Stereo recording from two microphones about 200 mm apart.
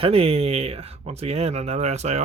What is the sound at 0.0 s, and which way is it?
Speech, 30° right (ahead or behind).